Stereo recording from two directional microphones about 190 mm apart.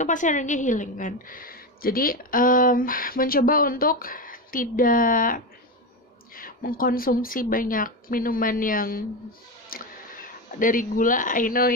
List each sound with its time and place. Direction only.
0.0 s a woman's voice: 40° left (ahead or behind)